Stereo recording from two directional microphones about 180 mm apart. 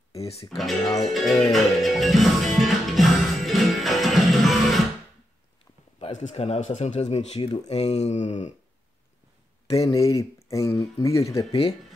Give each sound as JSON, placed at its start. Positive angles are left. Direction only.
{"t": 0.2, "sound": "music", "side_deg": 35}
{"t": 0.5, "sound": "speech", "side_deg": 0}
{"t": 1.0, "sound": "music", "side_deg": 0}
{"t": 5.9, "sound": "speech", "side_deg": 35}
{"t": 9.8, "sound": "speech", "side_deg": 20}